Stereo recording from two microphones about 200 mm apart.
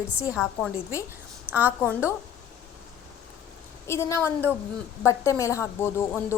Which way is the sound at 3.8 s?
15° left (ahead or behind).